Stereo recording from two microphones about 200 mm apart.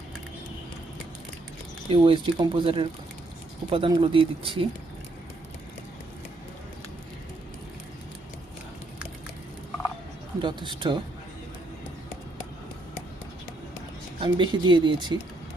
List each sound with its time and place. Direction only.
1.9 s speech: 25° right (ahead or behind)
10.4 s speech: 25° right (ahead or behind)
14.2 s speech: 25° right (ahead or behind)